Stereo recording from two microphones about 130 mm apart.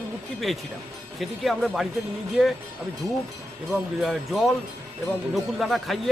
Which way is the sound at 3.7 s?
Centre (ahead or behind).